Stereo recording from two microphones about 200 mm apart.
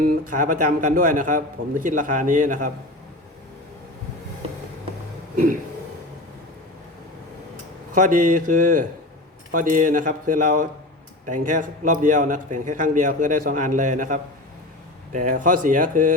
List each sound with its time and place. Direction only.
0.0 s a man's voice: 40° right (ahead or behind)
7.9 s a man's voice: 40° right (ahead or behind)